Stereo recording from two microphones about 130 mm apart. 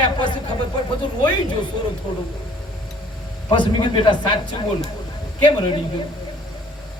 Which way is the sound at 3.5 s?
40° left (ahead or behind).